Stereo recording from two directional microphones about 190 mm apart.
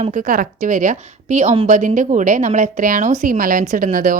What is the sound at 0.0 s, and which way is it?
A woman's voice, 45° right (ahead or behind).